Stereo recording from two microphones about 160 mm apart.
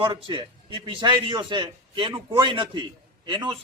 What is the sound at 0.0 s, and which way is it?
A man's voice, 30° right (ahead or behind).